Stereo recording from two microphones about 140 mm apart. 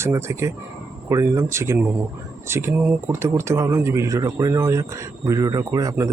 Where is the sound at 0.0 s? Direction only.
20° right (ahead or behind).